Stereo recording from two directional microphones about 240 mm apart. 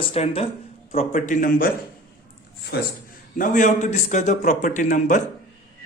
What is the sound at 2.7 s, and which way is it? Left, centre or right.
A man's voice, left.